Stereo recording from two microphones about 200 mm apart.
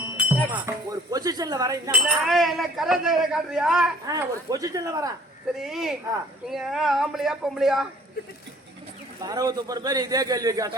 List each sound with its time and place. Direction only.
0.2 s speech: 10° right (ahead or behind)
1.9 s speech: 5° right (ahead or behind)
4.0 s speech: 20° right (ahead or behind)
5.6 s speech: centre (ahead or behind)
9.2 s a man's voice: 20° right (ahead or behind)